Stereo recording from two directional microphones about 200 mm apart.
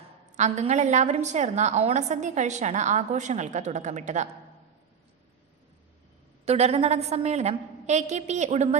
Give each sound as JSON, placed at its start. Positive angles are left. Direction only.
{"t": 0.3, "sound": "a woman's voice", "side_deg": -35}
{"t": 6.4, "sound": "a woman's voice", "side_deg": -30}